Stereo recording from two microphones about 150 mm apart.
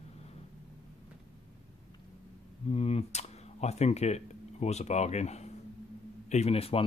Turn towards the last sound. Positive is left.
turn(degrees=40)  # may be behind; listen again after turning